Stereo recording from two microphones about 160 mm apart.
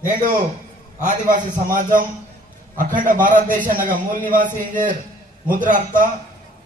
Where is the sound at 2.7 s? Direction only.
55° right (ahead or behind).